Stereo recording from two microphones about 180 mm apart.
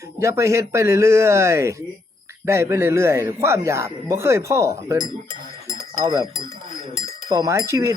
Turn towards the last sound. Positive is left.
turn(degrees=-15)  # may be behind; listen again after turning